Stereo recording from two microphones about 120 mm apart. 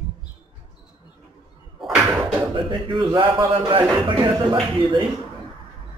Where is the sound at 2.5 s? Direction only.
40° right (ahead or behind).